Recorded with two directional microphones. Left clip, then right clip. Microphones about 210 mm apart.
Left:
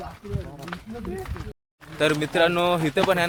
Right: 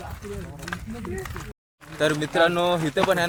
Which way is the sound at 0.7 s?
60° right (ahead or behind).